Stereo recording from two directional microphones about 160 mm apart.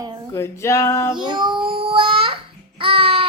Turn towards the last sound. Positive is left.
turn(degrees=-35)  # may be behind; listen again after turning